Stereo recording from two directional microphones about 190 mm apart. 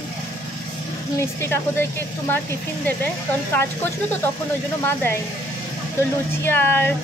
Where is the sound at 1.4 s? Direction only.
10° left (ahead or behind).